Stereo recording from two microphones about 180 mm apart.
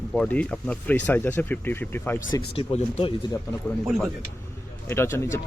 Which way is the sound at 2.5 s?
30° left (ahead or behind).